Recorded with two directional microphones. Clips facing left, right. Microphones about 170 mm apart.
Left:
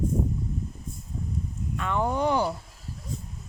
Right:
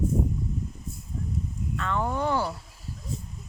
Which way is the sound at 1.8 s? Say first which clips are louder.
Left 2 dB; 15° left (ahead or behind).